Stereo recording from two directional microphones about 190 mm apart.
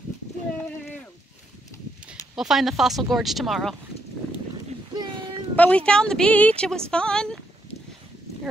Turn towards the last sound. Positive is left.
turn(degrees=5)  # may be behind; listen again after turning